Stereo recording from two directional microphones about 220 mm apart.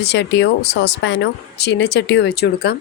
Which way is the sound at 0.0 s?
50° left (ahead or behind).